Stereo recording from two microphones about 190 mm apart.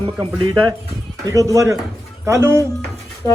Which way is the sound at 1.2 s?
15° right (ahead or behind).